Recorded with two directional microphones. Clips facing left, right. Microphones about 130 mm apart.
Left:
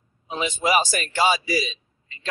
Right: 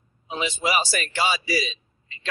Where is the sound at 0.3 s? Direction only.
45° left (ahead or behind).